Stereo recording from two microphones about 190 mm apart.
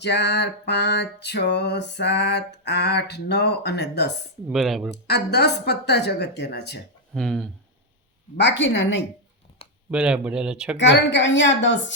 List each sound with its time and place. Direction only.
0.0 s a sound: 65° left (ahead or behind)
4.4 s speech: centre (ahead or behind)
5.0 s a sound: 60° left (ahead or behind)
7.1 s speech: centre (ahead or behind)
8.4 s a woman's voice: 70° left (ahead or behind)
9.9 s speech: 5° right (ahead or behind)
10.8 s a woman's voice: 70° left (ahead or behind)